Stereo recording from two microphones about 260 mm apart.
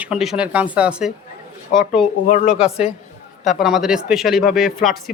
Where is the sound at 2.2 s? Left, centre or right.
Left.